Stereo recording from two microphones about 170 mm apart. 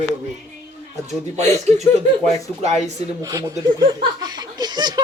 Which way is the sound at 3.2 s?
20° right (ahead or behind).